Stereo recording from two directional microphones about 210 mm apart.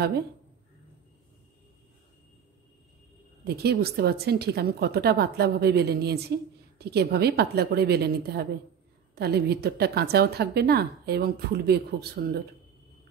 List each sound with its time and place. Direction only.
3.4 s a woman's voice: 50° right (ahead or behind)